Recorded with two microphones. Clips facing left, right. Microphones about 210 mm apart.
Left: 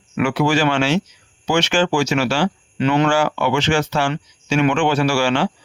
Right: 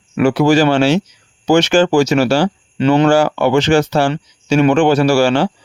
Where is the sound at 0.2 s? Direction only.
40° right (ahead or behind).